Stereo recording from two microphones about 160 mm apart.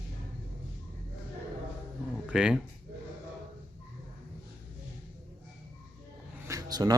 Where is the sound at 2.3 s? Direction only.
5° right (ahead or behind).